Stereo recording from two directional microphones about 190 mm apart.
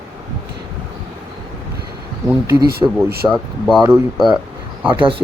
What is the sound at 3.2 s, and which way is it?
Speech, centre (ahead or behind).